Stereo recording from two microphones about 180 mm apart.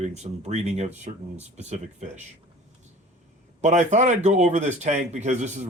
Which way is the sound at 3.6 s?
40° right (ahead or behind).